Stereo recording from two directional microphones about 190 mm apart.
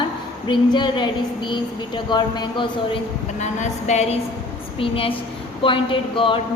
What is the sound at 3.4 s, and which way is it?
A woman's voice, 35° left (ahead or behind).